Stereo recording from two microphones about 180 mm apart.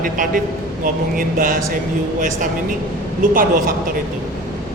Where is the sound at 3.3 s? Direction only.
50° right (ahead or behind).